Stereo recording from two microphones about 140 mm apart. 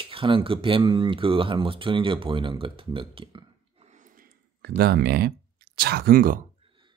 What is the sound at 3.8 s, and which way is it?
Snort, 65° right (ahead or behind).